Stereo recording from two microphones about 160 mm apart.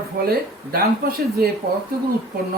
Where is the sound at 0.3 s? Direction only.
70° right (ahead or behind).